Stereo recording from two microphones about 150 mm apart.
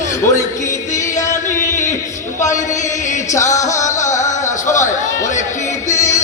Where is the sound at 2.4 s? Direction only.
55° left (ahead or behind).